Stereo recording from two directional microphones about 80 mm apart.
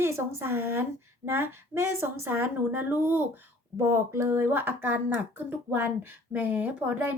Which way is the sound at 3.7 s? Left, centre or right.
Right.